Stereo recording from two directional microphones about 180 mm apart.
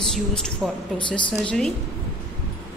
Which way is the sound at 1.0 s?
25° left (ahead or behind).